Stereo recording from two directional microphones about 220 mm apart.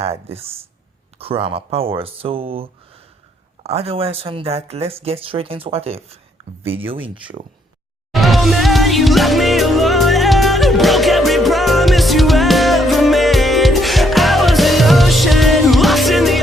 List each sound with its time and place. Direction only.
0.0 s speech: 25° right (ahead or behind)
8.1 s music: centre (ahead or behind)